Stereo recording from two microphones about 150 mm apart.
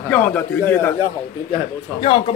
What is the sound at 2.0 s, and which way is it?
Speech, 40° left (ahead or behind).